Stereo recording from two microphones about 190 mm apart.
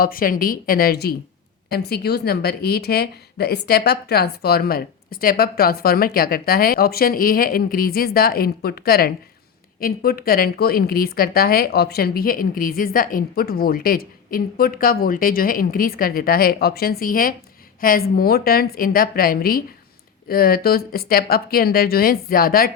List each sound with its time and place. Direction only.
0.0 s a woman's voice: 50° left (ahead or behind)